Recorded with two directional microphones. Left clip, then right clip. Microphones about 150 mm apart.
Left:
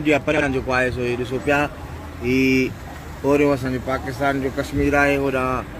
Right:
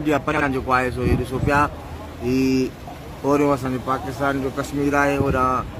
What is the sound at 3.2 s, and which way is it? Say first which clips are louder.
Speech: left 1 dB; centre (ahead or behind).